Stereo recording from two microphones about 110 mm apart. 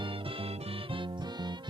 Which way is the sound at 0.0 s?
55° right (ahead or behind).